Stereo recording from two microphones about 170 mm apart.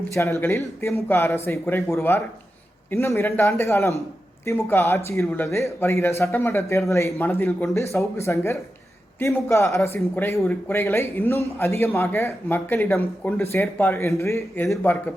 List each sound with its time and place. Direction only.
0.1 s speech: 15° left (ahead or behind)